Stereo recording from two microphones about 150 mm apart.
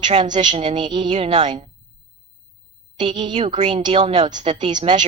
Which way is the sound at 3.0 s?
30° right (ahead or behind).